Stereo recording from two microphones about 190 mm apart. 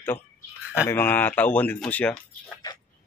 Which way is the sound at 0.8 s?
10° left (ahead or behind).